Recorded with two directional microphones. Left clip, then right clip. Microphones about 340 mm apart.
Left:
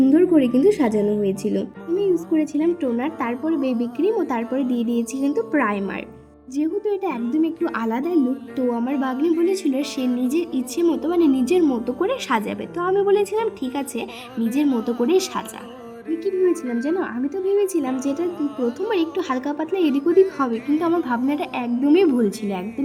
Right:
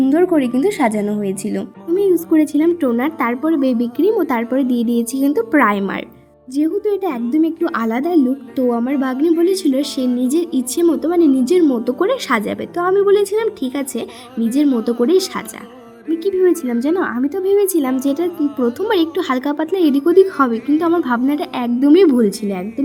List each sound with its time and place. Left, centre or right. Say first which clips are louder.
0.1 s a woman's voice: right 2 dB; centre
9.2 s speech: right 5 dB; centre
9.6 s a woman's voice: right 5 dB; centre
14.7 s speech: right 5 dB; centre
15.0 s a woman's voice: right 4 dB; centre
18.3 s speech: right 5 dB; centre
18.8 s a woman's voice: right 6 dB; centre